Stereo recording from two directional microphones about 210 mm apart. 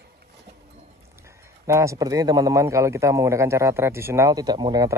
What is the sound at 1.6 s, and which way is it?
A man's voice, 15° right (ahead or behind).